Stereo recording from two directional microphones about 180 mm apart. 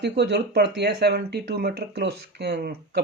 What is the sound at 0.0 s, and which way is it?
Speech, 70° right (ahead or behind).